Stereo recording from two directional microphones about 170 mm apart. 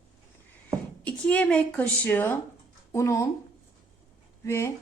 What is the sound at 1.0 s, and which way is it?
Speech, 10° left (ahead or behind).